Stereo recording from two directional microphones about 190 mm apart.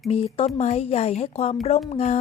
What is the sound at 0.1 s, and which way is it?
Speech, 30° left (ahead or behind).